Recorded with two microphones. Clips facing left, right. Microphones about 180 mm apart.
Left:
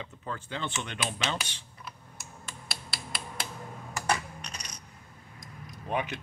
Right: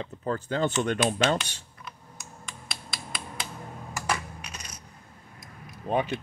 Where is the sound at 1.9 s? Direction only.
5° left (ahead or behind).